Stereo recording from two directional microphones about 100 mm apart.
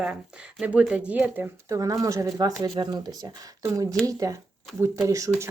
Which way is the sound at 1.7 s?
35° right (ahead or behind).